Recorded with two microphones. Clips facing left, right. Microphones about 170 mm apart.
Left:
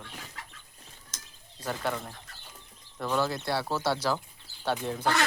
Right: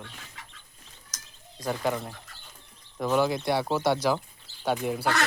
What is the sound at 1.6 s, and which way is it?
Speech, 10° right (ahead or behind).